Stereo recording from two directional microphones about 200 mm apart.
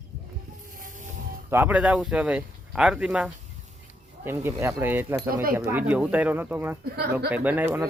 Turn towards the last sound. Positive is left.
turn(degrees=-10)  # may be behind; listen again after turning